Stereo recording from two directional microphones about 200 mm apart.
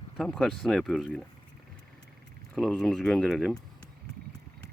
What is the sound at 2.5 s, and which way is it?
Speech, 5° left (ahead or behind).